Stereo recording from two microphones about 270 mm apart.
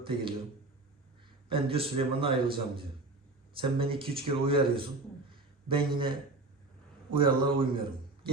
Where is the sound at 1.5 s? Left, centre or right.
Centre.